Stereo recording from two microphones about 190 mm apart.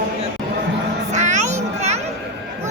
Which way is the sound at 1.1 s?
40° right (ahead or behind).